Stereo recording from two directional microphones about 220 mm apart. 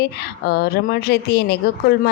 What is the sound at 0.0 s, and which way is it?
A woman's voice, 45° left (ahead or behind).